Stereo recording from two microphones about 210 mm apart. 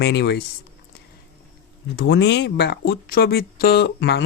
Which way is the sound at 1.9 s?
55° left (ahead or behind).